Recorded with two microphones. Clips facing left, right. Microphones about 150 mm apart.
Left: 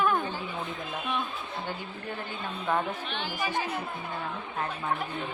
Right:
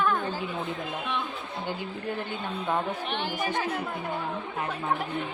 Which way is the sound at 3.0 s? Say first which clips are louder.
Right 3 dB; 65° right (ahead or behind).